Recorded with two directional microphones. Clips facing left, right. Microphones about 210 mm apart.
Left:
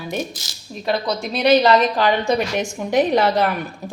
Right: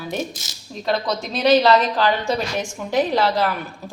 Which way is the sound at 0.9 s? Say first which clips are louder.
Left 1 dB; 10° left (ahead or behind).